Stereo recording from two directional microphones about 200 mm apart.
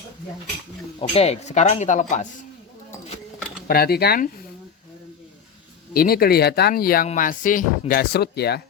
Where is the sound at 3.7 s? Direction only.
50° left (ahead or behind).